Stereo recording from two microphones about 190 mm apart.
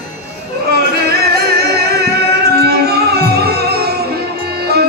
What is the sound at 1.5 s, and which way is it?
Music, 55° right (ahead or behind).